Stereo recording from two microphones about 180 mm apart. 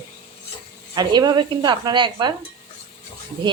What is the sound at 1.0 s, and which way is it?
A woman's voice, 25° right (ahead or behind).